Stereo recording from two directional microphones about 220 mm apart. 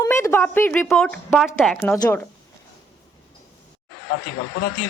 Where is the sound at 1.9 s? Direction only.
15° left (ahead or behind).